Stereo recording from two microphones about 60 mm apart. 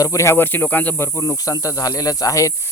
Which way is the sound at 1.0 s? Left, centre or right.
Left.